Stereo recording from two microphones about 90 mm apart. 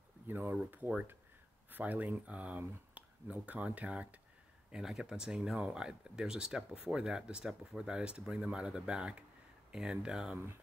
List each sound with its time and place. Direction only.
0.3 s speech: 20° right (ahead or behind)